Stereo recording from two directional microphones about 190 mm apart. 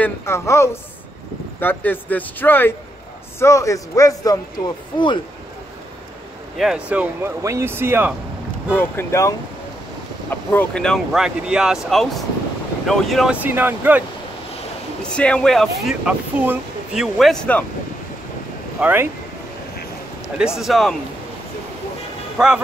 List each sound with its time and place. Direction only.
0.0 s speech: 15° left (ahead or behind)
6.6 s speech: 5° right (ahead or behind)
8.7 s speech: 15° left (ahead or behind)
10.3 s speech: 10° left (ahead or behind); by 14.0 s 10° right (ahead or behind)
15.1 s speech: 5° left (ahead or behind)
18.8 s speech: 10° right (ahead or behind)
20.5 s speech: centre (ahead or behind)
22.4 s speech: 5° right (ahead or behind)